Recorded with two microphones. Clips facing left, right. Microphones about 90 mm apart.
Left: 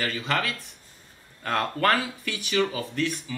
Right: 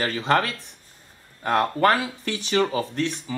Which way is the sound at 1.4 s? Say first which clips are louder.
Right 4 dB; 20° right (ahead or behind).